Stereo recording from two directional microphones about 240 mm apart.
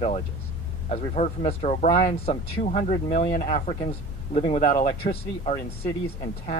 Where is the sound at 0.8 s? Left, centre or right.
Left.